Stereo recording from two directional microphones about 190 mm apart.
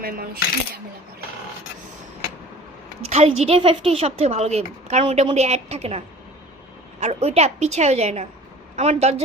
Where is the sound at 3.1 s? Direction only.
35° right (ahead or behind).